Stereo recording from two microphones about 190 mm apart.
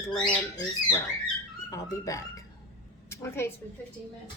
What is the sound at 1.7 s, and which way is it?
A woman's voice, 20° left (ahead or behind).